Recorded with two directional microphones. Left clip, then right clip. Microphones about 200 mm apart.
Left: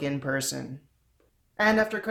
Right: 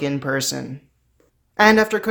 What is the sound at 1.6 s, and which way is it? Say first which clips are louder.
Speech: right 9 dB; 30° right (ahead or behind).